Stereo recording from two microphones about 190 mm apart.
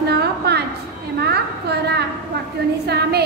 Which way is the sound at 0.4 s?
60° right (ahead or behind).